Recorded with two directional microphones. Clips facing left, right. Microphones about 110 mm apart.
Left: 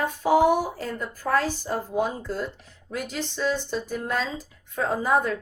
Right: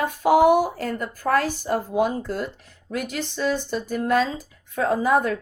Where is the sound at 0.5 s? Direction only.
65° right (ahead or behind).